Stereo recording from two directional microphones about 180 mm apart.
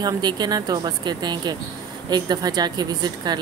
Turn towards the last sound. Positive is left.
turn(degrees=-25)  # may be behind; listen again after turning